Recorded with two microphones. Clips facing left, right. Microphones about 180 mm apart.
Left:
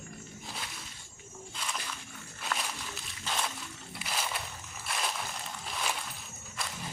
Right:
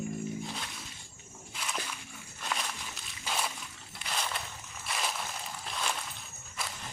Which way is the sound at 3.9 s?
5° left (ahead or behind).